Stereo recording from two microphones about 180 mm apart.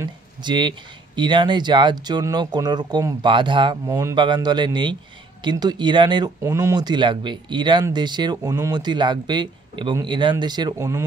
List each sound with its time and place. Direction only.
0.0 s speech: 25° right (ahead or behind)